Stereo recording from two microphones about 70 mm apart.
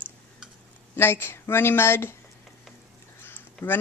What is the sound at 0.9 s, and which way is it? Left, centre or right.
Speech, left.